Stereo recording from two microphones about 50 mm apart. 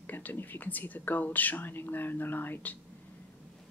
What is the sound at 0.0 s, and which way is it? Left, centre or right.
Speech, left.